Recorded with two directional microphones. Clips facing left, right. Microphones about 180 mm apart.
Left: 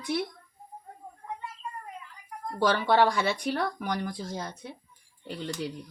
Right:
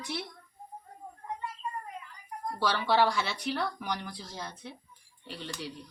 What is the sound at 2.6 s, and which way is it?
Speech, 50° left (ahead or behind).